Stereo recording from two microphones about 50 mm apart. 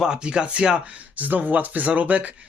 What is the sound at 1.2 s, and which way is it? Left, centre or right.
Speech, right.